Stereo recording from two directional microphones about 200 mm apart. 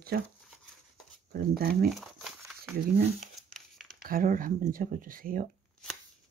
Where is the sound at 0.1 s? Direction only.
45° right (ahead or behind).